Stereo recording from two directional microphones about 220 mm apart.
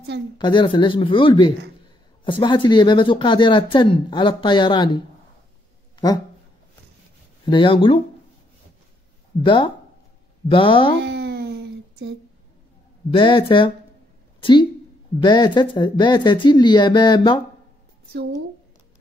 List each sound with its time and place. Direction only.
0.4 s speech: 20° left (ahead or behind)
7.4 s speech: 20° left (ahead or behind)
9.4 s speech: 20° left (ahead or behind)
11.0 s a sound: 50° right (ahead or behind)
13.1 s speech: 25° left (ahead or behind)